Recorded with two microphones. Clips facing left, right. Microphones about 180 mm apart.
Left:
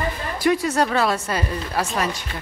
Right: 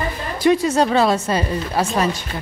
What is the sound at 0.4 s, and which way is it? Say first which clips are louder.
Speech: right 4 dB; 25° right (ahead or behind).